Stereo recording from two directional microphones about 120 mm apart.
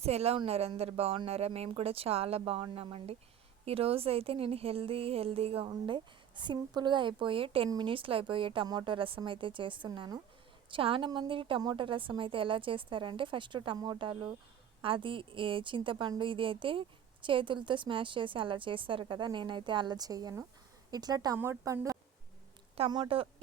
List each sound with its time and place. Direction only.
0.0 s a woman's voice: 60° right (ahead or behind); by 21.3 s 35° right (ahead or behind)
21.3 s a woman's voice: 15° right (ahead or behind)
22.9 s a woman's voice: 45° right (ahead or behind)